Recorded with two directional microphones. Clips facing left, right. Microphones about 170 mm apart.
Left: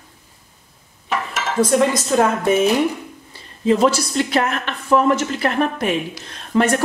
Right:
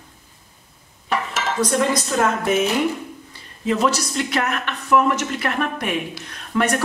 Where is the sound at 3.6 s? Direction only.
30° left (ahead or behind).